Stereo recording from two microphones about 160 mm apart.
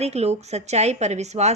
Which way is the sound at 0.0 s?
40° right (ahead or behind).